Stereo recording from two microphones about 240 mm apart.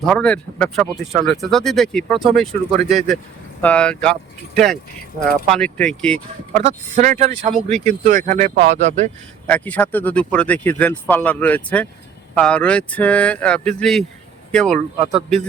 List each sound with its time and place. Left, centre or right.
0.0 s speech: centre
6.5 s speech: right
9.5 s speech: centre